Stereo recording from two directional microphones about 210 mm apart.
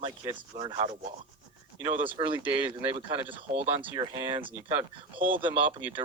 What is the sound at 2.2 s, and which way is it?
Speech, 25° right (ahead or behind).